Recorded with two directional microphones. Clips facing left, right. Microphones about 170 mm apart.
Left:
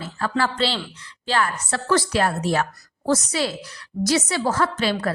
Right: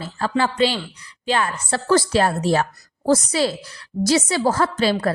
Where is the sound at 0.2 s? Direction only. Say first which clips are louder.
Right 4 dB; 20° right (ahead or behind).